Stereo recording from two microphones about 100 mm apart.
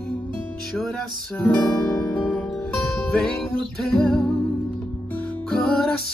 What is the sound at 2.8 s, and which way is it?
Music, centre (ahead or behind).